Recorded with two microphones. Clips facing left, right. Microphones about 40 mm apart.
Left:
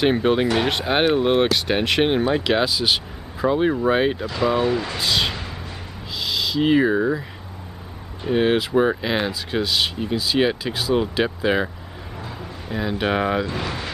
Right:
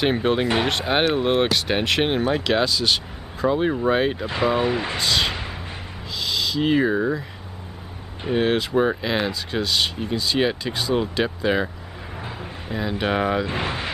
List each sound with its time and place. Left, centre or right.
0.0 s speech: centre
4.5 s speech: right
4.9 s speech: centre
8.3 s speech: centre
12.2 s a sound: right
12.7 s speech: centre
13.5 s speech: right